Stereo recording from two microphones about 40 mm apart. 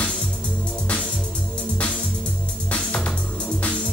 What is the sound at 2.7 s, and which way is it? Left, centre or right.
Music, left.